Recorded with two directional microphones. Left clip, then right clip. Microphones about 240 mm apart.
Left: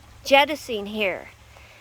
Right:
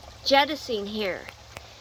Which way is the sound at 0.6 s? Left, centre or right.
Left.